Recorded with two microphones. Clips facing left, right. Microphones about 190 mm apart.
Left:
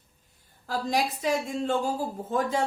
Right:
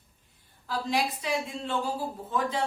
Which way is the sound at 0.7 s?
45° left (ahead or behind).